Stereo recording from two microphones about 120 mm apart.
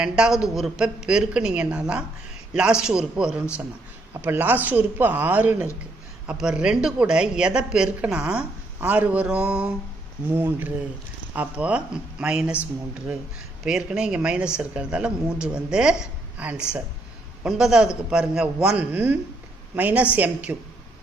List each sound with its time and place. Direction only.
0.0 s a woman's voice: 5° right (ahead or behind)
13.7 s a woman's voice: 5° right (ahead or behind)